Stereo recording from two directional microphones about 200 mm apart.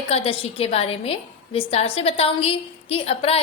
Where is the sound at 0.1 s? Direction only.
30° left (ahead or behind).